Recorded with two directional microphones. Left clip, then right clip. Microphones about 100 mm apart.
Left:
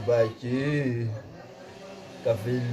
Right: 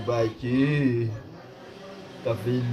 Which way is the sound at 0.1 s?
30° left (ahead or behind).